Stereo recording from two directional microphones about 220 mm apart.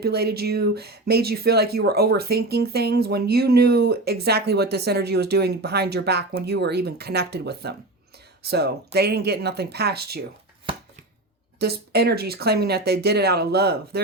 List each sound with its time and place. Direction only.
0.0 s speech: 45° right (ahead or behind)
11.6 s speech: 45° right (ahead or behind)